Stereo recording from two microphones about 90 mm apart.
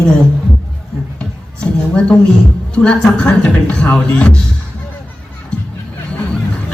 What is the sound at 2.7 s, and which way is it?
A man's voice, 10° left (ahead or behind).